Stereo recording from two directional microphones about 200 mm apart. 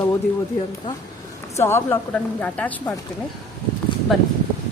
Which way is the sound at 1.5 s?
10° left (ahead or behind).